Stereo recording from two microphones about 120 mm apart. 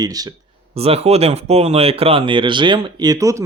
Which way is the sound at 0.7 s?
55° right (ahead or behind).